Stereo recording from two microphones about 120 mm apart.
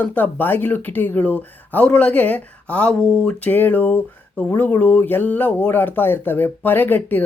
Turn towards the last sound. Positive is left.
turn(degrees=15)  # may be behind; listen again after turning